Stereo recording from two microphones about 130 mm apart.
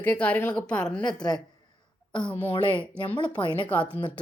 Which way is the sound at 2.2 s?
15° left (ahead or behind).